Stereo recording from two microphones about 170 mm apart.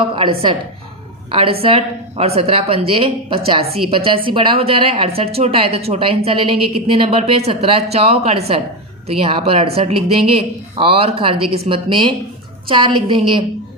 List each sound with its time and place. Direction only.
1.3 s a woman's voice: 35° right (ahead or behind)